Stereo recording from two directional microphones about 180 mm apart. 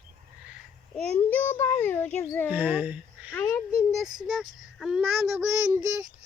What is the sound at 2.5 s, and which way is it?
Speech, 10° right (ahead or behind).